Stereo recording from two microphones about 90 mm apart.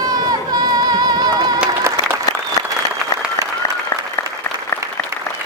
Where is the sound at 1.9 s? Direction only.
30° right (ahead or behind).